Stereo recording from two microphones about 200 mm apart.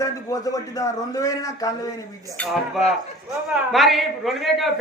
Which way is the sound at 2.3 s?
5° left (ahead or behind).